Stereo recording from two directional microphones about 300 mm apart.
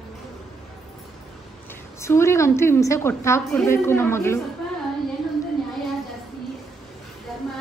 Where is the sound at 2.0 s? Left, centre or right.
Centre.